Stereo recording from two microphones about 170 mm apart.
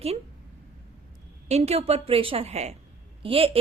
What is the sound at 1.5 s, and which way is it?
A woman's voice, 40° right (ahead or behind).